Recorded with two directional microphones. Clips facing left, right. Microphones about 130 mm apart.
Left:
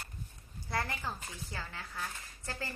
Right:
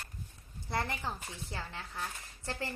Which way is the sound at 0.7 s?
20° right (ahead or behind).